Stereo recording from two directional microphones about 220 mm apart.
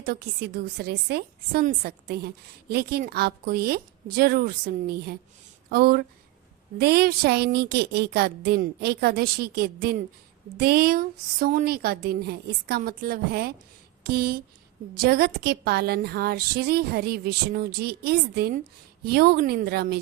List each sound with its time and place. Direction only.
0.0 s a woman's voice: 45° right (ahead or behind)